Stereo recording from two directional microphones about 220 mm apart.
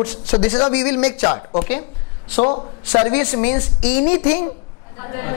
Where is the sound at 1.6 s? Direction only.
15° left (ahead or behind).